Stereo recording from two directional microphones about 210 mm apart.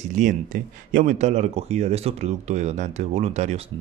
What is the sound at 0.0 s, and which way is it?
A man's voice, 35° right (ahead or behind).